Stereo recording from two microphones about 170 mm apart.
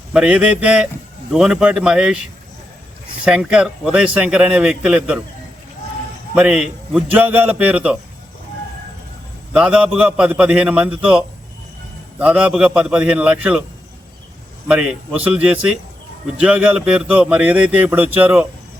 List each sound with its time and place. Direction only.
0.1 s speech: 5° right (ahead or behind)
3.2 s speech: 5° right (ahead or behind)
6.3 s a man's voice: 5° right (ahead or behind)
9.5 s a man's voice: 5° right (ahead or behind)
14.7 s a man's voice: 5° right (ahead or behind)